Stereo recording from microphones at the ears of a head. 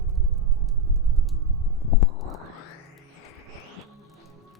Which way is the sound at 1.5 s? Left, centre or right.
Left.